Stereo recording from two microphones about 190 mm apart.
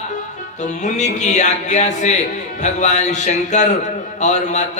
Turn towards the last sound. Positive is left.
turn(degrees=40)  # may be behind; listen again after turning